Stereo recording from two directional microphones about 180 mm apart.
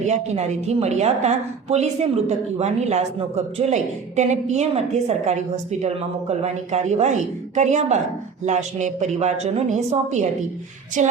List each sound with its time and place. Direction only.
0.0 s speech: 40° right (ahead or behind)
11.0 s speech: 40° right (ahead or behind)